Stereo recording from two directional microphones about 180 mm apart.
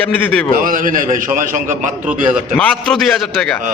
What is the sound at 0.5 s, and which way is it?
A man's voice, 50° right (ahead or behind).